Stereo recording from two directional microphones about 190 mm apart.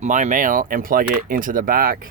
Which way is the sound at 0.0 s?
40° right (ahead or behind).